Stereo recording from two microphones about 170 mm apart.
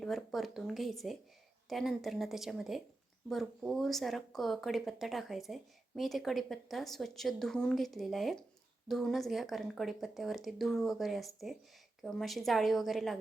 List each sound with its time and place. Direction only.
0.0 s speech: 5° left (ahead or behind)